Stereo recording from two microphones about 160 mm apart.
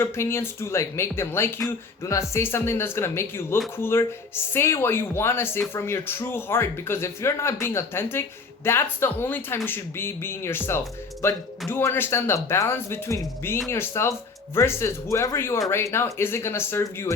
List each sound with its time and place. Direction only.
0.0 s speech: 15° left (ahead or behind)